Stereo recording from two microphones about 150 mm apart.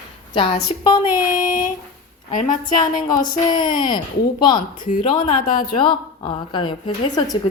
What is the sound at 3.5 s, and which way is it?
Speech, 30° left (ahead or behind).